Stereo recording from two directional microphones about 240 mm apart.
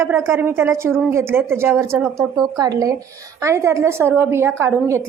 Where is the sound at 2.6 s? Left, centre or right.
Centre.